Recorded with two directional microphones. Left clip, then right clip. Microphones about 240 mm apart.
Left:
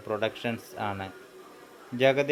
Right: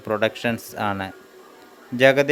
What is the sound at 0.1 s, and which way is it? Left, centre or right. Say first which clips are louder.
A man's voice: right 8 dB; right.